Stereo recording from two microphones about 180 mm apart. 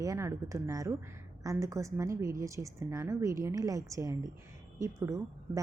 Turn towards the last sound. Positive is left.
turn(degrees=-15)  # may be behind; listen again after turning